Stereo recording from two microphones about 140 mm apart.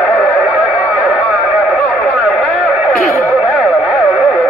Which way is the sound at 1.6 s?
Centre (ahead or behind).